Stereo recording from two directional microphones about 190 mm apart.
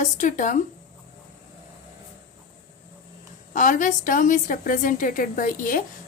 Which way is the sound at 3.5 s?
40° left (ahead or behind).